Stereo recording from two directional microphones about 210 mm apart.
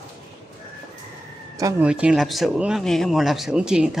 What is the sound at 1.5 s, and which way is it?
Speech, 15° right (ahead or behind).